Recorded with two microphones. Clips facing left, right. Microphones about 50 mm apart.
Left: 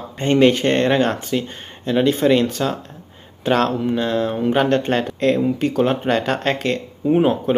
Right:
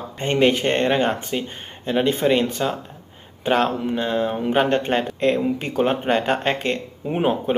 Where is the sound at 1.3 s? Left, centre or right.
Right.